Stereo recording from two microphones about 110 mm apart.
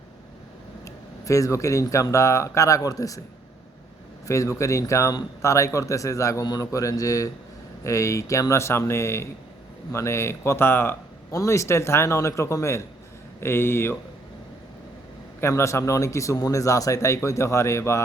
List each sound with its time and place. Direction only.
1.2 s speech: 30° left (ahead or behind)
4.3 s speech: 25° left (ahead or behind)
15.4 s speech: 25° left (ahead or behind)